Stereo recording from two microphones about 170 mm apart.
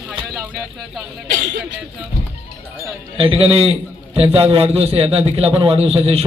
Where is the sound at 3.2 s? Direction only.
35° right (ahead or behind).